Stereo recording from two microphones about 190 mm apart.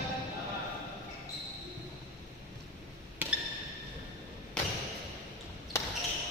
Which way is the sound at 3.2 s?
10° right (ahead or behind).